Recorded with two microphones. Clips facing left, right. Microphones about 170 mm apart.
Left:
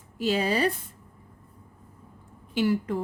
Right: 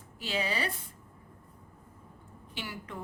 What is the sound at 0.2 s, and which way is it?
Speech, 40° left (ahead or behind).